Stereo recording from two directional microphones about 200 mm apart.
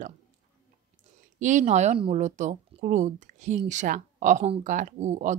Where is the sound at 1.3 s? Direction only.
40° right (ahead or behind).